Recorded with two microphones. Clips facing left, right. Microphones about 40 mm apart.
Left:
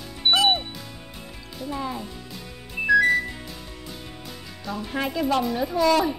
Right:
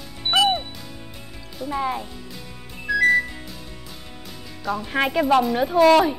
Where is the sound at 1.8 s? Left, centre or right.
Right.